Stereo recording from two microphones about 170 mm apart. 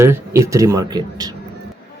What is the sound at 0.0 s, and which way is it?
Speech, 15° right (ahead or behind).